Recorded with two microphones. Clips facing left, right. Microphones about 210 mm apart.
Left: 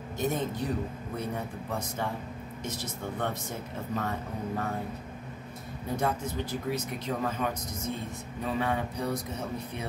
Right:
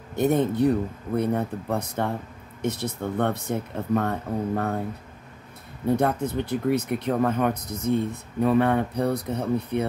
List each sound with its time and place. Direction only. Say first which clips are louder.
0.1 s speech: right 9 dB; 60° right (ahead or behind)
5.9 s speech: right 4 dB; 60° right (ahead or behind)